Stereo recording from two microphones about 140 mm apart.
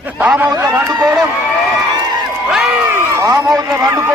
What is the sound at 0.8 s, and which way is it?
Speech, 25° right (ahead or behind).